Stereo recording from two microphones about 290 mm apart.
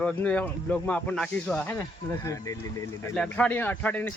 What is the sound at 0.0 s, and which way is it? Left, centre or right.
Speech, centre.